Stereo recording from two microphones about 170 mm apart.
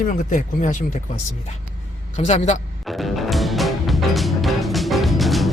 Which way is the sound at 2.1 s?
45° left (ahead or behind).